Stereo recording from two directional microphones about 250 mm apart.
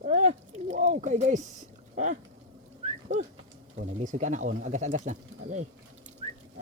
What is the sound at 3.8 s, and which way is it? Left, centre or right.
Speech, right.